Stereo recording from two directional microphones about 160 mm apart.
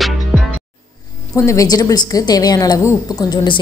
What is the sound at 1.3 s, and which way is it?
A woman's voice, 20° left (ahead or behind).